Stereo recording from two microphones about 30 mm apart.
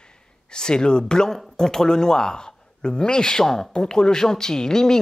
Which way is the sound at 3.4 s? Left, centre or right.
Centre.